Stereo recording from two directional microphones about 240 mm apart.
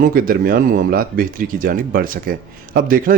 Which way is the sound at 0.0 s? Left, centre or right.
Right.